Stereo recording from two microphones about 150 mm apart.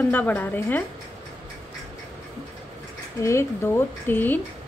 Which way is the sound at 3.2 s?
20° left (ahead or behind).